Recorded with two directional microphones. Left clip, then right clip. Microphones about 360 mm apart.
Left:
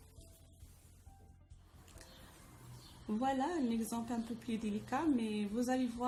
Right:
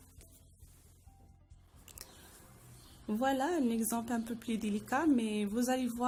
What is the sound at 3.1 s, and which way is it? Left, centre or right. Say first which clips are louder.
Speech: right 4 dB; right.